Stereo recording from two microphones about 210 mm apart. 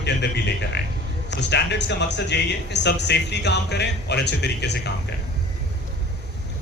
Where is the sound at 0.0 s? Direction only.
55° left (ahead or behind).